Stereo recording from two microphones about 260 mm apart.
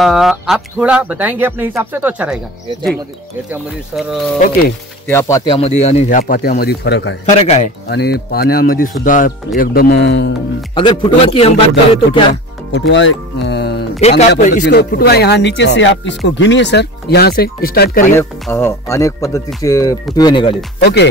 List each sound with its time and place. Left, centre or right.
0.0 s speech: centre
5.0 s speech: centre; by 7.2 s left
7.2 s speech: left
7.9 s speech: left
10.7 s speech: centre
12.7 s speech: left
18.1 s speech: centre
20.8 s speech: left